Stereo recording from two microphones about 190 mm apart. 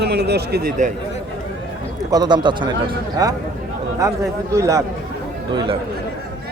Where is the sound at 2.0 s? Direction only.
20° right (ahead or behind).